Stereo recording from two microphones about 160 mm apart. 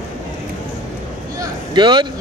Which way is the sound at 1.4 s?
30° right (ahead or behind).